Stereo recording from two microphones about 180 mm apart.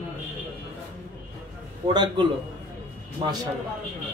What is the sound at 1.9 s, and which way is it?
A man's voice, 25° right (ahead or behind).